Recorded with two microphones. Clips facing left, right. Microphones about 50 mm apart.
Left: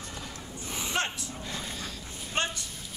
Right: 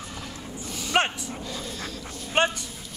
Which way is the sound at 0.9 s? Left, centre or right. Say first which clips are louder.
Right 9 dB; right.